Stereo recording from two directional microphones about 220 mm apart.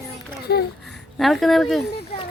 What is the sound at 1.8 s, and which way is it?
Speech, 50° left (ahead or behind).